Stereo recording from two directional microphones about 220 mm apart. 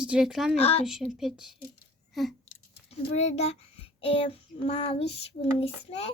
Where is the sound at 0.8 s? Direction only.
Centre (ahead or behind).